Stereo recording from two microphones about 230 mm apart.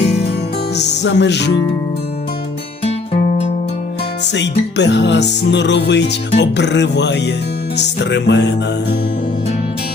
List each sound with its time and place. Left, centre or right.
0.0 s music: left
1.0 s music: left
4.4 s music: left